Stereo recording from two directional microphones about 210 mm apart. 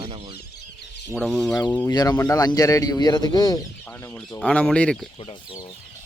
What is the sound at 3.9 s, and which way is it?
Speech, 10° left (ahead or behind).